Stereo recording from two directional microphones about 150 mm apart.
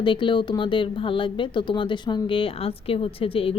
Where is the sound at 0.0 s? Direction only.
35° left (ahead or behind).